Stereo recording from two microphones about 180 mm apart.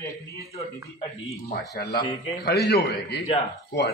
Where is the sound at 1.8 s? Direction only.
60° left (ahead or behind).